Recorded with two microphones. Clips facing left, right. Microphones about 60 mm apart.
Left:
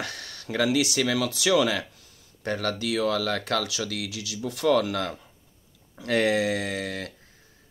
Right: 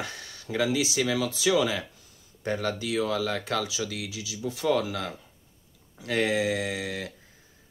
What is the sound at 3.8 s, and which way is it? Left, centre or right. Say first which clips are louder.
Speech: left 2 dB; left.